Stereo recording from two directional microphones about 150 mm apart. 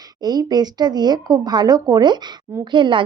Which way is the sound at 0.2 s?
25° right (ahead or behind).